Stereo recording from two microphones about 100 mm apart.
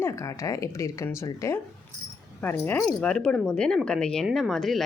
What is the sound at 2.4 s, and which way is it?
Speech, 20° left (ahead or behind).